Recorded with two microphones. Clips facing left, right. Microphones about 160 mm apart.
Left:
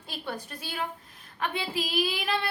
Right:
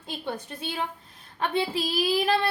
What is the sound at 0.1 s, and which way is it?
A woman's voice, 25° right (ahead or behind).